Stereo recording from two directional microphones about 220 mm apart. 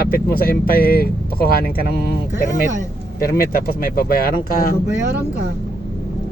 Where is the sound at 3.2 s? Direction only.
45° left (ahead or behind).